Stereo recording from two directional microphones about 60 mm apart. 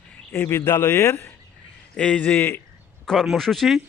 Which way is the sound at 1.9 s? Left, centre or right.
Centre.